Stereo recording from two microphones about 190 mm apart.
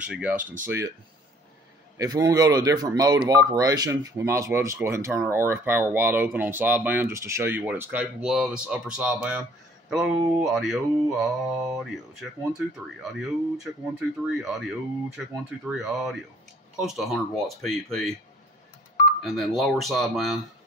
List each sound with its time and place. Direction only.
0.1 s speech: 5° right (ahead or behind)
2.0 s speech: 20° right (ahead or behind)
9.8 s mantra: centre (ahead or behind)
13.9 s mantra: centre (ahead or behind)
19.2 s mantra: centre (ahead or behind)